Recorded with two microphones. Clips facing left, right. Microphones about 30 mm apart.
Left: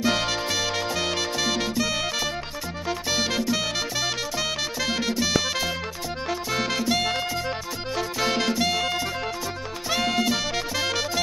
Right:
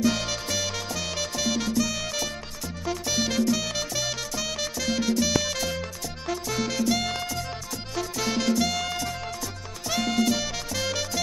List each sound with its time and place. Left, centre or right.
0.0 s music: left